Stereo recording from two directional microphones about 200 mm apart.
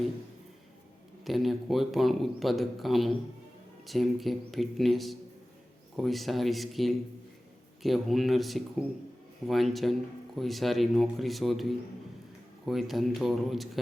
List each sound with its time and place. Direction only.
1.2 s a man's voice: centre (ahead or behind)